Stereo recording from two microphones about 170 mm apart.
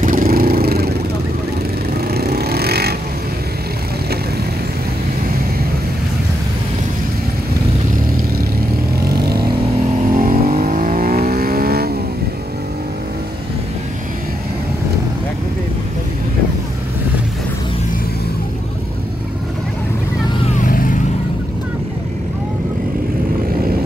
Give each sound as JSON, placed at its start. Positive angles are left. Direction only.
{"t": 0.0, "sound": "vehicle", "side_deg": -55}
{"t": 2.0, "sound": "vehicle", "side_deg": -65}
{"t": 10.1, "sound": "vehicle", "side_deg": -55}
{"t": 20.6, "sound": "vehicle", "side_deg": 55}